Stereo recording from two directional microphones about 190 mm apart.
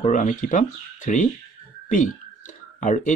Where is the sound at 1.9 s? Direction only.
45° left (ahead or behind).